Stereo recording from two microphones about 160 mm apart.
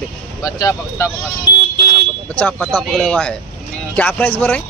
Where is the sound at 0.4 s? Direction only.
20° left (ahead or behind).